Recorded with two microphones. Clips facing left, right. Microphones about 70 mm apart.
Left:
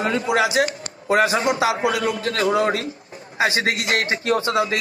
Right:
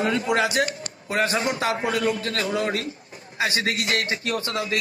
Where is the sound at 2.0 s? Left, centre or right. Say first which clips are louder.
Left 3 dB; left.